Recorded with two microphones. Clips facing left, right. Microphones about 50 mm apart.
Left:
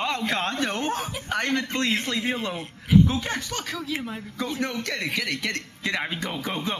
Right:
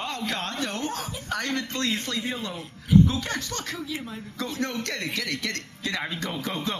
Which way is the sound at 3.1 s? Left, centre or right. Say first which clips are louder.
Left 2 dB; left.